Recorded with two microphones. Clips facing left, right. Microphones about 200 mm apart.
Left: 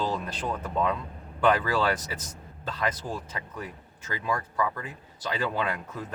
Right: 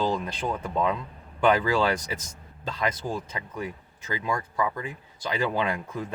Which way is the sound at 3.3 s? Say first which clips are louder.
Right 4 dB; 20° right (ahead or behind).